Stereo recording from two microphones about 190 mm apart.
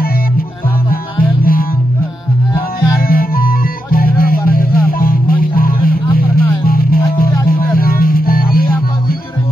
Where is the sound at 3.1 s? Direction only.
50° left (ahead or behind).